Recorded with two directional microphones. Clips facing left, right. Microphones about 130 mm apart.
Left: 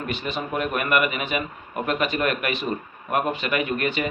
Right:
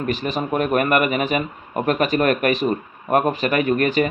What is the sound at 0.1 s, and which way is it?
Speech, 40° right (ahead or behind).